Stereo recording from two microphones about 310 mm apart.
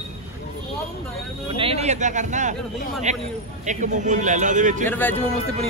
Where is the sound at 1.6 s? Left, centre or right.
Centre.